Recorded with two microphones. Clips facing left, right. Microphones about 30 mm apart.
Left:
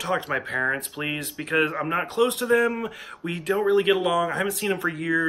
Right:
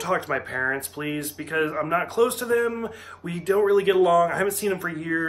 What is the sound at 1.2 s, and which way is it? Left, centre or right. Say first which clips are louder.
Speech: left 3 dB; left.